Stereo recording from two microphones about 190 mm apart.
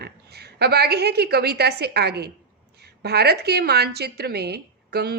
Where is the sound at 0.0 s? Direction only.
55° right (ahead or behind).